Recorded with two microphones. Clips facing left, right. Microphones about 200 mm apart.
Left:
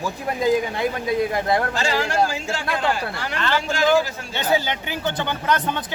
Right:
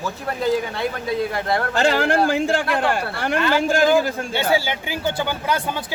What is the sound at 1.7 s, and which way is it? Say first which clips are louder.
A man's voice: right 4 dB; 60° right (ahead or behind).